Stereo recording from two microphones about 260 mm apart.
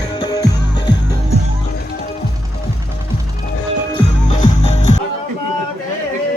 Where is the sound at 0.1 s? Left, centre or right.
Centre.